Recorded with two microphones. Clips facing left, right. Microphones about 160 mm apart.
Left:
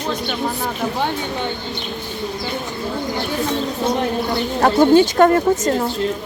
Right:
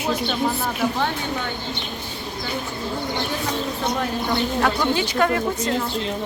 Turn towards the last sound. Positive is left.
turn(degrees=40)  # may be behind; listen again after turning